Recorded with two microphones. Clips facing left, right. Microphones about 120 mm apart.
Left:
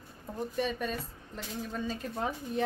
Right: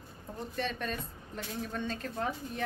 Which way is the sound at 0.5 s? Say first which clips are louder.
Left 2 dB; 10° left (ahead or behind).